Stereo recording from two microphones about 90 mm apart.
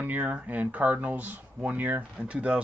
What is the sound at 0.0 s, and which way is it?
Speech, 20° right (ahead or behind).